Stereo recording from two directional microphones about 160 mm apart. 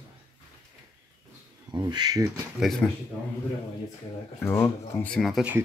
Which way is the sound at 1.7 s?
25° right (ahead or behind).